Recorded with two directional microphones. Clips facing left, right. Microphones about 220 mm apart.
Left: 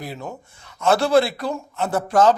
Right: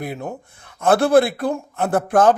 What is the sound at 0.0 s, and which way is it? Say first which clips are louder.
A man's voice: right 4 dB; 55° right (ahead or behind).